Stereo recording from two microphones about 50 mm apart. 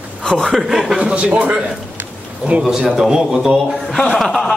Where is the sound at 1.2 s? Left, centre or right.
Right.